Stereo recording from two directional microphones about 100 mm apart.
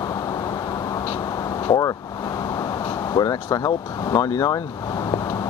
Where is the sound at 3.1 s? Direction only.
40° left (ahead or behind).